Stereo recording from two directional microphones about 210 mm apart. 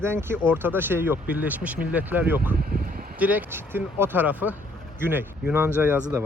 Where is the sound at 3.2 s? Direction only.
5° right (ahead or behind).